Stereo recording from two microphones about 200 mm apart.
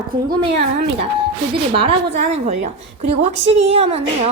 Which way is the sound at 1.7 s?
25° right (ahead or behind).